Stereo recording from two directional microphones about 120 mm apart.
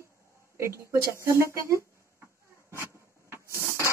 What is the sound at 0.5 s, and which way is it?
Speech, 20° right (ahead or behind).